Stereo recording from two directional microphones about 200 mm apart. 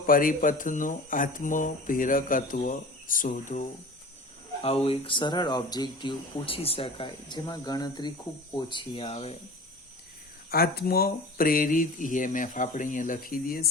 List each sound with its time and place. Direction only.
0.0 s speech: 45° left (ahead or behind)
4.6 s speech: 30° left (ahead or behind)
10.5 s speech: 50° left (ahead or behind)